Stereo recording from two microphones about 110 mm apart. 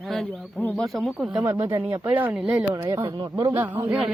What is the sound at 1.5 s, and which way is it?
Speech, 20° right (ahead or behind).